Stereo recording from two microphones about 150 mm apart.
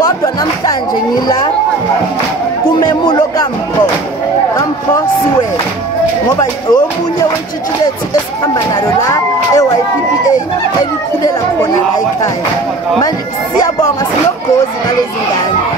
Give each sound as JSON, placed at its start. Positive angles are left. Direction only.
{"t": 0.0, "sound": "chatter", "side_deg": 25}
{"t": 2.8, "sound": "speech", "side_deg": 30}
{"t": 6.4, "sound": "speech", "side_deg": 25}
{"t": 8.8, "sound": "a sound", "side_deg": 20}